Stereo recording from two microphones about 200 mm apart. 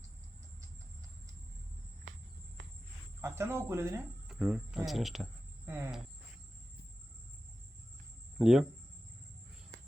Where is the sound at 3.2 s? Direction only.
15° right (ahead or behind).